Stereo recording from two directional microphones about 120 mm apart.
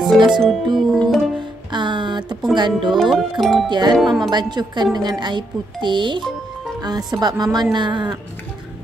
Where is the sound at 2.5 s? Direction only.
40° right (ahead or behind).